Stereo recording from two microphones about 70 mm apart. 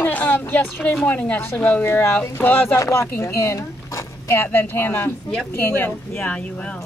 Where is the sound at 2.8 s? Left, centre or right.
Left.